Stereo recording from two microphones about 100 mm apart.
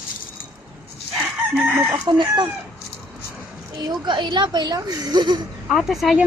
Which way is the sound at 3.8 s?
45° right (ahead or behind).